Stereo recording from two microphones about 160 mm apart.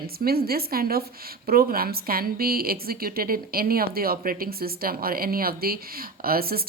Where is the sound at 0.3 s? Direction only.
75° right (ahead or behind).